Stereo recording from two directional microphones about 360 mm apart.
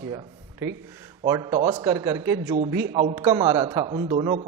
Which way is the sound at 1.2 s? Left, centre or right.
Centre.